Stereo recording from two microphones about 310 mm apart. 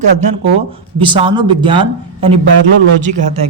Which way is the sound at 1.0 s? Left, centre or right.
Centre.